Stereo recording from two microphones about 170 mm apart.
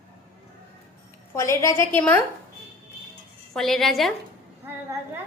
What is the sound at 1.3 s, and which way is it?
Speech, 15° left (ahead or behind).